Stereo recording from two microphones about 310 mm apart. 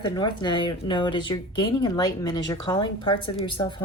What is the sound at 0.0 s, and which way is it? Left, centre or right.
Speech, centre.